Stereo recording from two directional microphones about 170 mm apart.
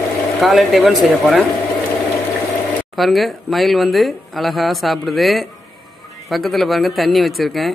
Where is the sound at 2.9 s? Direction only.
Centre (ahead or behind).